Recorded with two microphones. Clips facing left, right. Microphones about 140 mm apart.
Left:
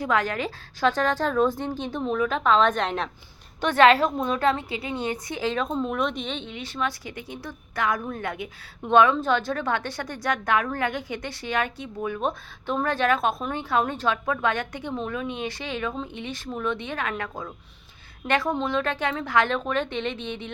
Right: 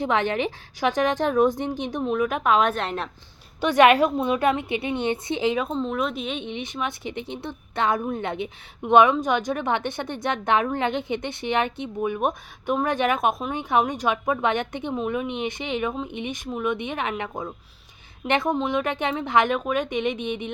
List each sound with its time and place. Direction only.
0.0 s a woman's voice: 25° right (ahead or behind); by 3.1 s 5° right (ahead or behind)
3.6 s a woman's voice: 15° right (ahead or behind)
5.7 s speech: 5° left (ahead or behind)
6.5 s a woman's voice: 20° right (ahead or behind)